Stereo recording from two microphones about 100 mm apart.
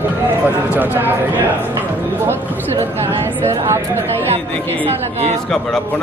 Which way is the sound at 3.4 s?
30° right (ahead or behind).